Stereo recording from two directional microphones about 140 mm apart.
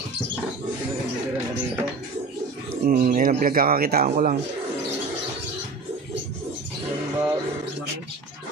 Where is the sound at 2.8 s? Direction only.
80° right.